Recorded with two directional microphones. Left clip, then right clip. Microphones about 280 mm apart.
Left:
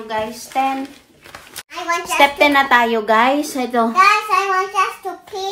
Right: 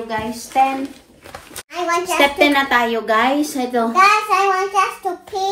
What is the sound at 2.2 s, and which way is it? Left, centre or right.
A woman's voice, centre.